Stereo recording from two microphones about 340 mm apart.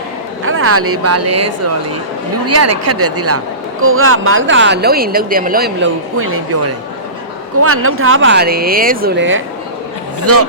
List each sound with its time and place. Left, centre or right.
0.4 s speech: right
7.6 s speech: right